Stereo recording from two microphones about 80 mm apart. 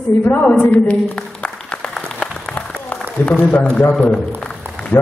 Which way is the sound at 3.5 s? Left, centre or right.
Centre.